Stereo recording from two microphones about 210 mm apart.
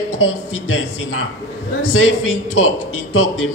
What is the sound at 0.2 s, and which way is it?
Speech, 75° left (ahead or behind).